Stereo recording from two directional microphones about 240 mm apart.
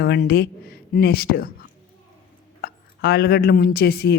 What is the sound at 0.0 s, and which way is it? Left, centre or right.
Speech, left.